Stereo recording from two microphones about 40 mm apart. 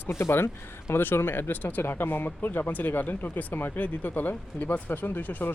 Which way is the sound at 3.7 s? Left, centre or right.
Left.